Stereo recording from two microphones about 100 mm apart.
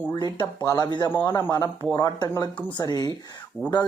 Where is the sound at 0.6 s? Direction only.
35° left (ahead or behind).